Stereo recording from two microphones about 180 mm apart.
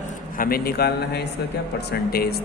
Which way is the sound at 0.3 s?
55° left (ahead or behind).